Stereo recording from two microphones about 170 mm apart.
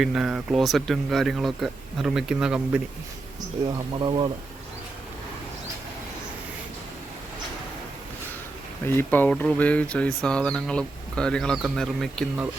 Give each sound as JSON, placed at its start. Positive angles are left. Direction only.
{"t": 0.0, "sound": "speech", "side_deg": -5}
{"t": 4.0, "sound": "speech", "side_deg": -30}
{"t": 9.0, "sound": "speech", "side_deg": 10}